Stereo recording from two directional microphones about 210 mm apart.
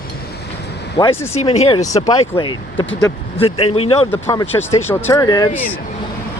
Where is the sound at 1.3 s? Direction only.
30° left (ahead or behind).